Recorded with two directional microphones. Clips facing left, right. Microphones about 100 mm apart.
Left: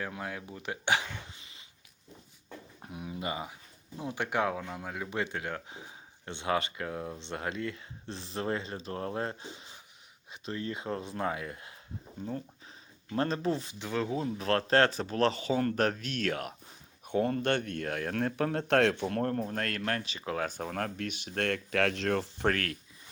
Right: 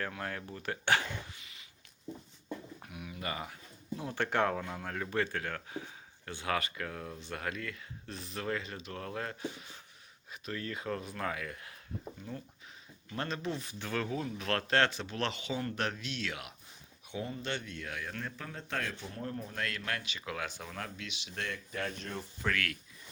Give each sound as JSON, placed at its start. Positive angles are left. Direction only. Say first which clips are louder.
{"t": 0.2, "sound": "speech", "louder": "left 1 dB", "side_deg": 10}
{"t": 1.4, "sound": "a sound", "louder": "even", "side_deg": 30}
{"t": 2.8, "sound": "a sound", "louder": "left 9 dB", "side_deg": 30}
{"t": 3.9, "sound": "speech", "louder": "even", "side_deg": 15}
{"t": 13.1, "sound": "speech", "louder": "left 7 dB", "side_deg": 35}
{"t": 13.7, "sound": "speech", "louder": "left 3 dB", "side_deg": 20}
{"t": 17.1, "sound": "speech", "louder": "left 10 dB", "side_deg": 55}
{"t": 22.4, "sound": "speech", "louder": "left 3 dB", "side_deg": 35}